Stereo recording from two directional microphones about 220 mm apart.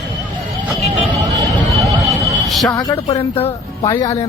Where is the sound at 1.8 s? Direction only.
Centre (ahead or behind).